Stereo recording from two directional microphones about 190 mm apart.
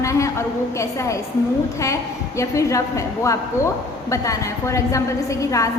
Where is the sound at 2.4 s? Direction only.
15° left (ahead or behind).